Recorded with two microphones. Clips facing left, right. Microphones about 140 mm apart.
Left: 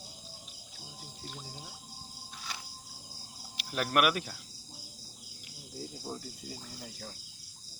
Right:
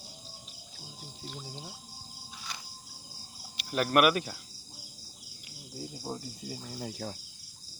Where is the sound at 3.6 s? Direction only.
Centre (ahead or behind).